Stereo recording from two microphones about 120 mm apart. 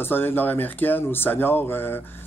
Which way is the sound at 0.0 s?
20° left (ahead or behind).